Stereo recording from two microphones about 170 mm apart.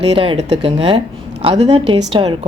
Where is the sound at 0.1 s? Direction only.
35° right (ahead or behind).